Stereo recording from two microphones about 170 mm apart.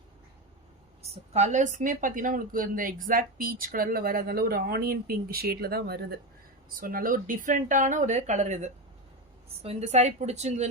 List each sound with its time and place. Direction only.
1.0 s a woman's voice: 40° right (ahead or behind); by 6.1 s 70° right (ahead or behind)
6.7 s a woman's voice: 55° right (ahead or behind); by 10.7 s 40° right (ahead or behind)